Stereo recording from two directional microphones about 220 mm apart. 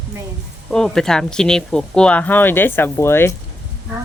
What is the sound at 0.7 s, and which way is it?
Speech, 5° left (ahead or behind).